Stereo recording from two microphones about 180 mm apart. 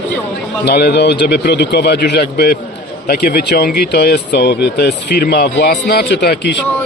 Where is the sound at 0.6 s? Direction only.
65° left (ahead or behind).